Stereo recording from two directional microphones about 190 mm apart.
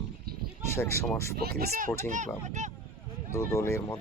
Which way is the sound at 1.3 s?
55° right (ahead or behind).